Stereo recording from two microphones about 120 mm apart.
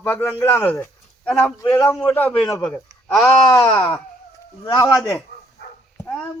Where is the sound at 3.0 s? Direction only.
5° left (ahead or behind).